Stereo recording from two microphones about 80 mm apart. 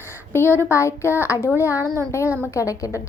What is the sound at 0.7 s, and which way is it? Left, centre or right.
A woman's voice, left.